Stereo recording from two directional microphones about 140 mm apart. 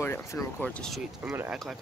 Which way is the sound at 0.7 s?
5° left (ahead or behind).